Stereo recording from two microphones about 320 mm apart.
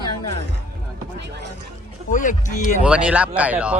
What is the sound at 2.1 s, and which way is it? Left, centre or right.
Speech, left.